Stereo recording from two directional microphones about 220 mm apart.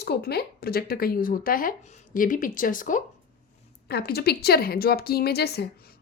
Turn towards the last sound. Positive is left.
turn(degrees=45)  # may be behind; listen again after turning